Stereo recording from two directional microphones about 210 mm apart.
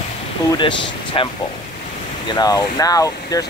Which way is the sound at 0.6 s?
20° left (ahead or behind).